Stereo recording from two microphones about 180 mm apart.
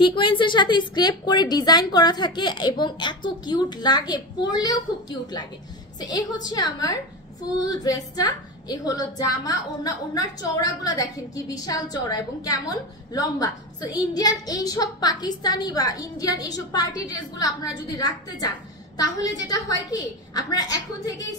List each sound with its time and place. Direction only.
0.0 s a woman's voice: 30° left (ahead or behind)
5.9 s a woman's voice: 20° left (ahead or behind)